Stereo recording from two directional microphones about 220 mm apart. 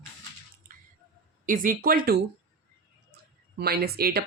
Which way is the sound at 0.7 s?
40° right (ahead or behind).